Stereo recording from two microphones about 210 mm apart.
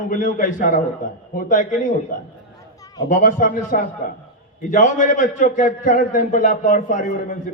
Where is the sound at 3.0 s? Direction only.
40° left (ahead or behind).